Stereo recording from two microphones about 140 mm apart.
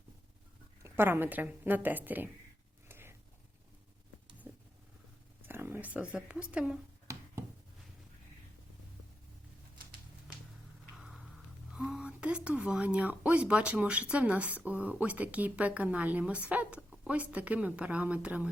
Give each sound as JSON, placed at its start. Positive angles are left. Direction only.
{"t": 0.8, "sound": "a woman's voice", "side_deg": -20}
{"t": 2.9, "sound": "a sound", "side_deg": -15}
{"t": 4.4, "sound": "a sound", "side_deg": -15}
{"t": 5.5, "sound": "speech", "side_deg": -15}
{"t": 10.9, "sound": "music", "side_deg": 0}
{"t": 11.7, "sound": "speech", "side_deg": -5}